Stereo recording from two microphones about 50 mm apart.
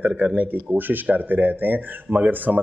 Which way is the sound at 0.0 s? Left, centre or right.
Right.